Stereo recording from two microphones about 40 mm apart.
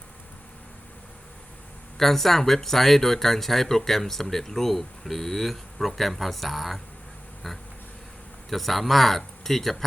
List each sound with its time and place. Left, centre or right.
2.0 s speech: centre